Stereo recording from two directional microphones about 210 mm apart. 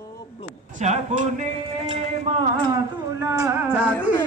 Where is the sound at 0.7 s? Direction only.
35° right (ahead or behind).